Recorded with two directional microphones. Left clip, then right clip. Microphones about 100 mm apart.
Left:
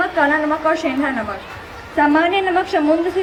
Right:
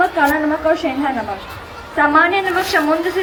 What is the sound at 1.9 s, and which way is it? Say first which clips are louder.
Speech: right 2 dB; 35° left (ahead or behind).